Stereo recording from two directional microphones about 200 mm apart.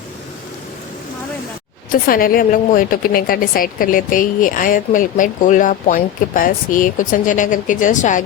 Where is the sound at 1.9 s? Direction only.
45° left (ahead or behind).